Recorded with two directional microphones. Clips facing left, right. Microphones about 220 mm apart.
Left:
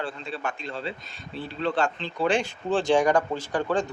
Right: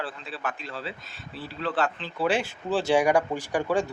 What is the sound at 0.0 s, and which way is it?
Speech, 5° right (ahead or behind).